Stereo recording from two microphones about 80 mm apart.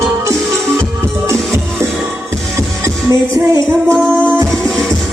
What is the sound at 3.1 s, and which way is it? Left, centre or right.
Music, right.